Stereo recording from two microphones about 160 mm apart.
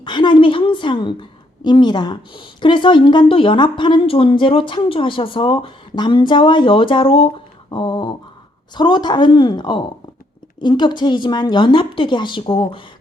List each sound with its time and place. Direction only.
0.0 s a woman's voice: 30° left (ahead or behind)